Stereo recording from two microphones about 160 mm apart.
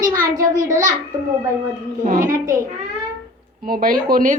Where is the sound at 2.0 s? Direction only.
55° right (ahead or behind).